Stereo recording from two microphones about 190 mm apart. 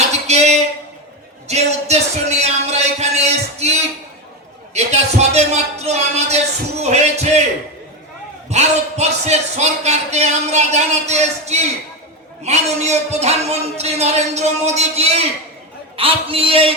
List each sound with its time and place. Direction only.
0.3 s a sound: 35° right (ahead or behind)
1.5 s speech: 35° right (ahead or behind)
8.4 s speech: 35° right (ahead or behind)